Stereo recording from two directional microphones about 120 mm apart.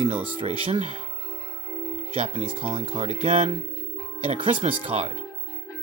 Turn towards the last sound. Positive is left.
turn(degrees=-55)  # may be behind; listen again after turning